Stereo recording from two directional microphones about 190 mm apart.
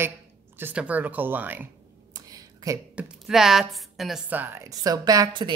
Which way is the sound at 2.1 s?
20° right (ahead or behind).